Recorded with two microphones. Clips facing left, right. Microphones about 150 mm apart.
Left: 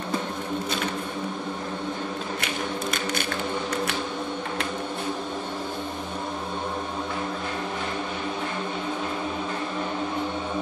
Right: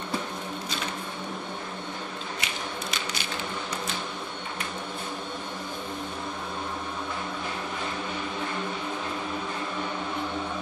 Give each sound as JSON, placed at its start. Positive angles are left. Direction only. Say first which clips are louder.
{"t": 2.4, "sound": "tap", "louder": "left 6 dB", "side_deg": 55}